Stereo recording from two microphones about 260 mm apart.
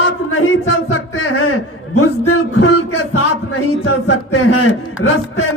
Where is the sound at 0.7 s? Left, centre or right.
Left.